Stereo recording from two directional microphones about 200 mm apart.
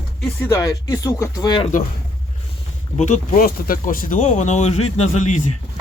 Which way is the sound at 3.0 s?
40° left (ahead or behind).